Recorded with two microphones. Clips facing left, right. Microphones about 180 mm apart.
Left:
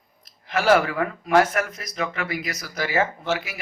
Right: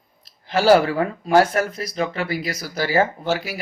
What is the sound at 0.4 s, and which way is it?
Speech, 30° right (ahead or behind).